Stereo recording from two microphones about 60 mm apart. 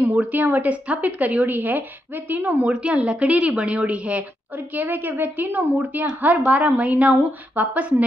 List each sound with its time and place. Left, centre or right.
0.1 s a woman's voice: right
2.6 s a woman's voice: centre
4.7 s a woman's voice: right